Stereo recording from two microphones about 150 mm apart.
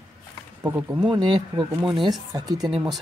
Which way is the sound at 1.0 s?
30° right (ahead or behind).